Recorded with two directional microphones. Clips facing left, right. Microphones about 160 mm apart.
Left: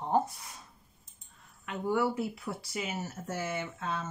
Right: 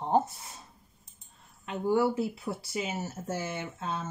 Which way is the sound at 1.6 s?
30° right (ahead or behind).